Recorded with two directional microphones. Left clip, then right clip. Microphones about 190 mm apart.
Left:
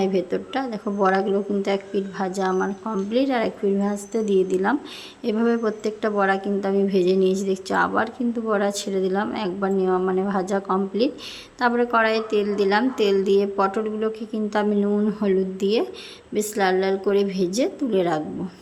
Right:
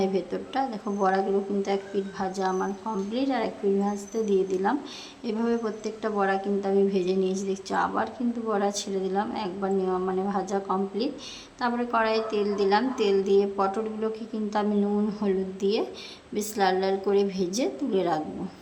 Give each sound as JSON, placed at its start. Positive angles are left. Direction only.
{"t": 0.0, "sound": "a woman's voice", "side_deg": 20}